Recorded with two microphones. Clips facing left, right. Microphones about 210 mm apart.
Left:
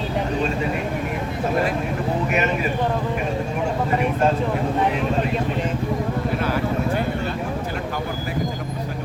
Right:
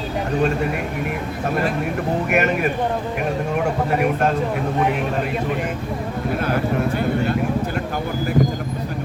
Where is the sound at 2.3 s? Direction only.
60° right (ahead or behind).